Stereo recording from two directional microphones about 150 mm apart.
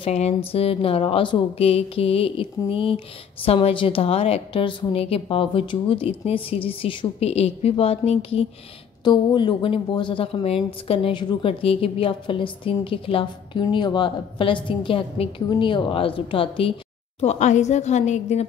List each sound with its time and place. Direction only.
0.0 s a woman's voice: 45° left (ahead or behind)
9.0 s speech: 30° left (ahead or behind)
17.2 s a woman's voice: 50° left (ahead or behind)